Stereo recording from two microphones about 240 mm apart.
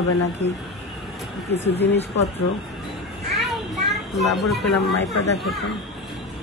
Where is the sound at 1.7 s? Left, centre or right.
Left.